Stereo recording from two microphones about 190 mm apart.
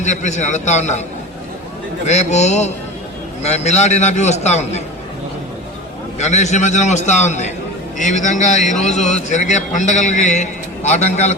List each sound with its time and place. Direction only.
0.0 s a man's voice: 40° left (ahead or behind)
2.0 s a man's voice: 35° left (ahead or behind)
6.1 s a man's voice: 35° left (ahead or behind)